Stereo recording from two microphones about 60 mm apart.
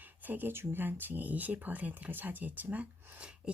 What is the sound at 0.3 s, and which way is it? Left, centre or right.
Speech, right.